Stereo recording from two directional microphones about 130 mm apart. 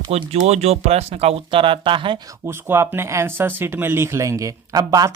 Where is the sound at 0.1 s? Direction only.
55° right (ahead or behind).